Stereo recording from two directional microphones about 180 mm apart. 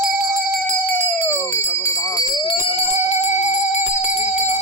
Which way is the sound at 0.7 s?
10° left (ahead or behind).